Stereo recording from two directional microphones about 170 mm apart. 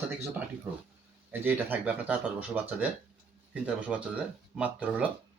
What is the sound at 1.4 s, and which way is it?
Speech, 10° right (ahead or behind).